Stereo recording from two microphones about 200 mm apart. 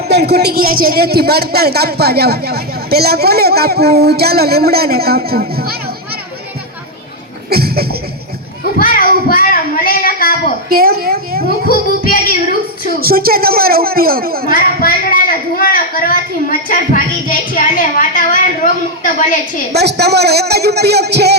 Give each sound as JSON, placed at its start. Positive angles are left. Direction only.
{"t": 0.1, "sound": "a man's voice", "side_deg": -55}
{"t": 7.5, "sound": "a sound", "side_deg": -50}
{"t": 8.8, "sound": "a sound", "side_deg": 45}
{"t": 10.7, "sound": "a woman's voice", "side_deg": -50}
{"t": 11.7, "sound": "speech", "side_deg": 45}
{"t": 13.0, "sound": "a man's voice", "side_deg": -50}
{"t": 14.5, "sound": "speech", "side_deg": 45}
{"t": 19.7, "sound": "a man's voice", "side_deg": -55}